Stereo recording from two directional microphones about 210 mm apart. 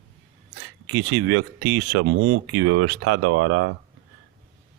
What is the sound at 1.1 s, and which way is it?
Speech, 60° right (ahead or behind).